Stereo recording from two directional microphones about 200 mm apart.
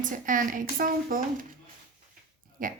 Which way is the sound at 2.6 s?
40° right (ahead or behind).